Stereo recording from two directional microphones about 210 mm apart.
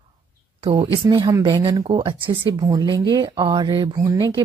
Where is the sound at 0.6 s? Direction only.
25° right (ahead or behind).